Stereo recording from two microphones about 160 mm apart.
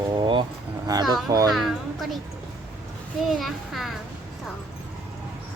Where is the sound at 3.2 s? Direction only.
Centre (ahead or behind).